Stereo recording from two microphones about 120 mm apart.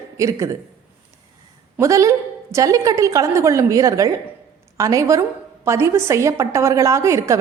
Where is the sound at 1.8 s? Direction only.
25° right (ahead or behind).